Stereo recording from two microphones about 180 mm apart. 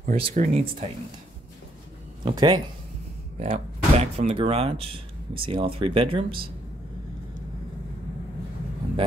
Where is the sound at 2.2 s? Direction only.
25° right (ahead or behind).